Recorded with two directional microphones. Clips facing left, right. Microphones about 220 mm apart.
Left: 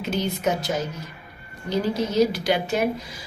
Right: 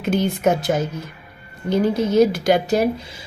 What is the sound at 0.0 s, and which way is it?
A woman's voice, 55° right (ahead or behind).